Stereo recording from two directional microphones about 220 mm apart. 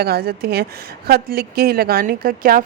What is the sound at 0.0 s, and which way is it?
A woman's voice, 45° right (ahead or behind).